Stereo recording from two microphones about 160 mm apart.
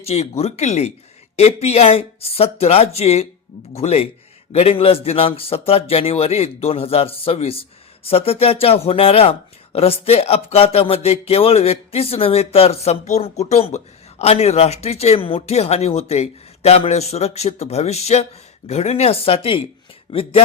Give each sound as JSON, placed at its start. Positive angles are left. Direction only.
{"t": 0.0, "sound": "speech", "side_deg": 40}